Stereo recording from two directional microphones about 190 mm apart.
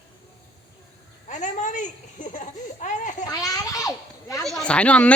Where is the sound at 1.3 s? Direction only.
40° left (ahead or behind).